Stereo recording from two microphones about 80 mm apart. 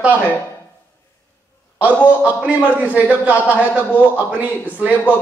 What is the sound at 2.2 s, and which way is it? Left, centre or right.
A man's voice, centre.